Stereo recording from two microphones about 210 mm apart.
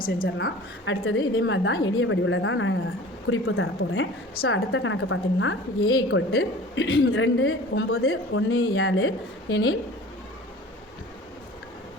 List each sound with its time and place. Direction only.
0.0 s a woman's voice: 40° left (ahead or behind)
0.3 s a woman's voice: 65° left (ahead or behind)
3.2 s speech: 75° left (ahead or behind)
4.4 s speech: 65° left (ahead or behind)